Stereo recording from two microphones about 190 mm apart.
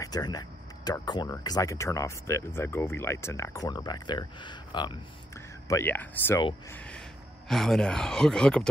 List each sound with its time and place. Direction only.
0.0 s speech: 20° left (ahead or behind)
5.7 s speech: 10° left (ahead or behind)